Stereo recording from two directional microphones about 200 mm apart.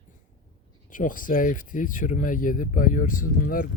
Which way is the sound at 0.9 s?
40° left (ahead or behind).